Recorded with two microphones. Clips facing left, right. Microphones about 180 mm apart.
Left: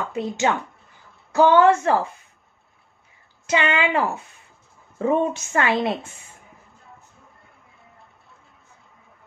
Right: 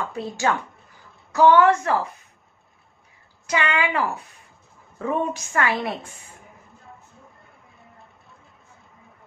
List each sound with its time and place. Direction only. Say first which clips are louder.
0.1 s a woman's voice: left 3 dB; 20° left (ahead or behind)
3.4 s a woman's voice: left 2 dB; 25° left (ahead or behind)